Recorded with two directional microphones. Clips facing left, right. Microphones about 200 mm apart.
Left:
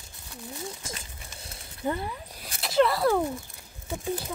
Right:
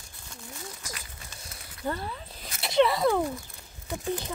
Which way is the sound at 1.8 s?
15° left (ahead or behind).